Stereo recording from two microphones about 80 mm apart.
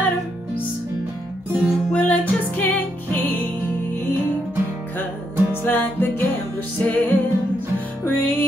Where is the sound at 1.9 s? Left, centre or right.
Left.